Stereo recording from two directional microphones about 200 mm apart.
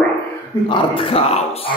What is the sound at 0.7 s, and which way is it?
Speech, 25° left (ahead or behind).